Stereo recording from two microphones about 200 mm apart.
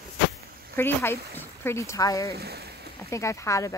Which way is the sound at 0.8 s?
10° left (ahead or behind).